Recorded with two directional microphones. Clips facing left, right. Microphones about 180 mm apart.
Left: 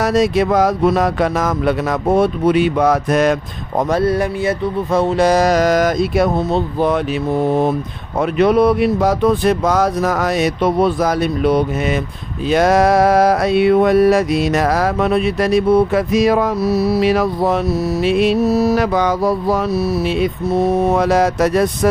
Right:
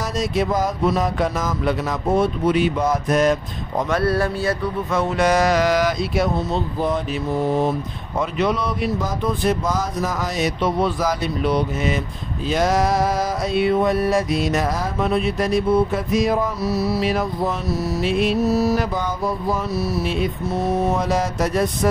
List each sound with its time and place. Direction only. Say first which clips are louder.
0.0 s mantra: left 8 dB; 70° left (ahead or behind)
4.0 s a sound: left 4 dB; 20° left (ahead or behind)
4.9 s speech: left 5 dB; 30° left (ahead or behind); by 7.0 s 65° left (ahead or behind)
8.2 s speech: left 9 dB; 60° left (ahead or behind)
12.4 s mantra: left 6 dB; 65° left (ahead or behind)